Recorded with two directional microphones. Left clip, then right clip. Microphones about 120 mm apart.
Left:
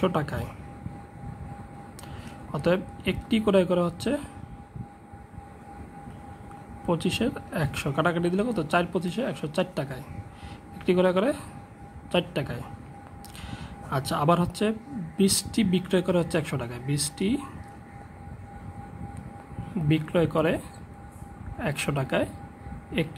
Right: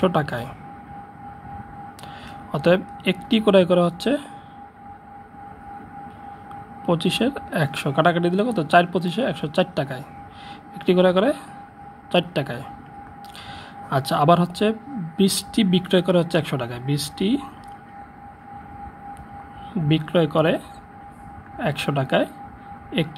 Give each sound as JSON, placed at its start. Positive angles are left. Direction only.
{"t": 0.0, "sound": "speech", "side_deg": -5}
{"t": 2.5, "sound": "speech", "side_deg": -5}
{"t": 6.9, "sound": "speech", "side_deg": -5}
{"t": 19.9, "sound": "speech", "side_deg": 0}